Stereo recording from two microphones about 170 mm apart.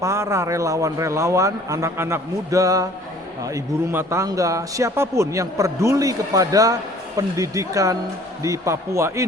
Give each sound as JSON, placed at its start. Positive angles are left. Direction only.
{"t": 0.0, "sound": "a man's voice", "side_deg": -15}